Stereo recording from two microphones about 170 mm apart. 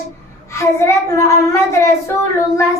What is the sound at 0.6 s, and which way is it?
Child singing, 15° left (ahead or behind).